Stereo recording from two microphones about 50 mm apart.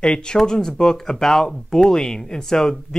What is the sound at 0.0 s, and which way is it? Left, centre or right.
Speech, centre.